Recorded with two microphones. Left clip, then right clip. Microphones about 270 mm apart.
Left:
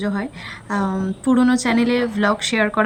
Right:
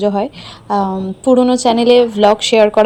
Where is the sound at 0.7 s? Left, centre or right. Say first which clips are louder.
Right 8 dB; centre.